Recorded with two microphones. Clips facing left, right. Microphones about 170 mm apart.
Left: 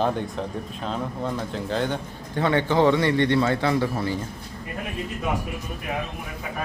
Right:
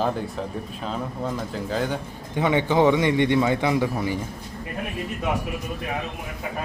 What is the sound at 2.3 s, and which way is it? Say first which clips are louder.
A man's voice: right 1 dB; 15° right (ahead or behind).